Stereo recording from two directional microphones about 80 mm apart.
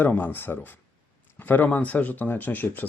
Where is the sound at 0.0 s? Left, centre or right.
Left.